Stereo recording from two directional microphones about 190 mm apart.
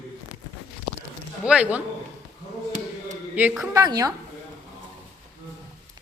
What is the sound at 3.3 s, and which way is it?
Speech, 10° right (ahead or behind).